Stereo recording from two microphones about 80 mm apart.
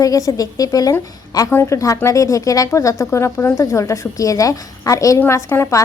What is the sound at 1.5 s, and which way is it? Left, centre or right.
Speech, left.